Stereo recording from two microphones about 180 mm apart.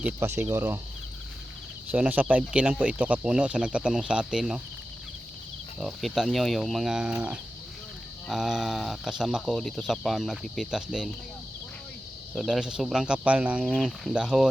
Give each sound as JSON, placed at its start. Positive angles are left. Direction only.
{"t": 0.0, "sound": "speech", "side_deg": -15}
{"t": 1.9, "sound": "speech", "side_deg": -10}
{"t": 5.8, "sound": "speech", "side_deg": 0}
{"t": 12.3, "sound": "speech", "side_deg": 0}